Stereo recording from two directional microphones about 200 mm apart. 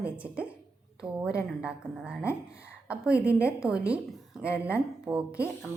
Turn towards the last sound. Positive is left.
turn(degrees=-5)  # may be behind; listen again after turning